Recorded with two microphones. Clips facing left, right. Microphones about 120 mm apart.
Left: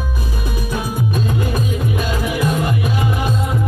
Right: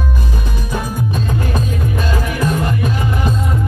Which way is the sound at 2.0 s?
10° left (ahead or behind).